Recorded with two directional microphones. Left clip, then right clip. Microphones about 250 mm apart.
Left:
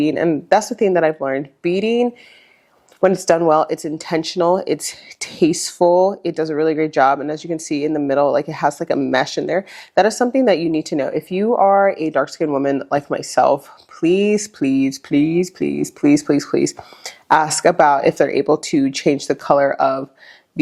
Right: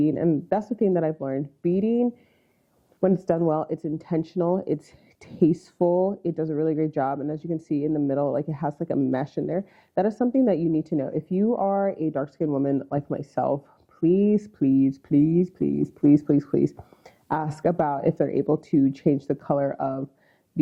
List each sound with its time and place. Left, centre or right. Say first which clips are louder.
0.0 s speech: left 6 dB; centre
5.8 s speech: left 9 dB; left
6.2 s speech: left 7 dB; centre